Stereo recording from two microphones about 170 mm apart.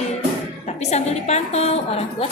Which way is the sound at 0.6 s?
40° left (ahead or behind).